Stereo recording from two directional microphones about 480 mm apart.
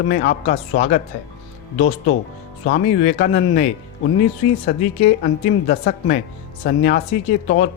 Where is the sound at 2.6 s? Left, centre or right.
Centre.